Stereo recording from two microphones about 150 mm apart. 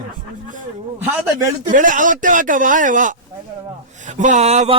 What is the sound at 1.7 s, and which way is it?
Speech, 60° right (ahead or behind).